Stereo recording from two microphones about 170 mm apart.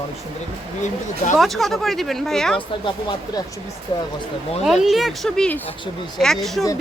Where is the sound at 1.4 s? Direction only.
Centre (ahead or behind).